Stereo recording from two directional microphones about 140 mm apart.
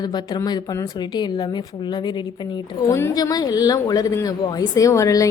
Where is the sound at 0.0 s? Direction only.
30° left (ahead or behind).